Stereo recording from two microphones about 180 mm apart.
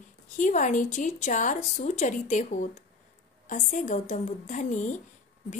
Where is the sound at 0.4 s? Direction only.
45° left (ahead or behind).